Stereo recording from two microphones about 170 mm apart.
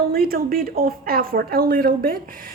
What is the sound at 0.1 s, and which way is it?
A child's voice, 60° right (ahead or behind).